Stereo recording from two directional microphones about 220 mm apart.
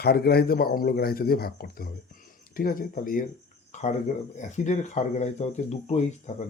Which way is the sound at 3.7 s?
30° left (ahead or behind).